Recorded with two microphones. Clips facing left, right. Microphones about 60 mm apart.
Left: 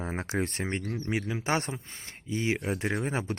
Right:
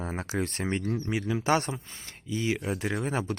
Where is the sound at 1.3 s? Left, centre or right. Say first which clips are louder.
Right 5 dB; left.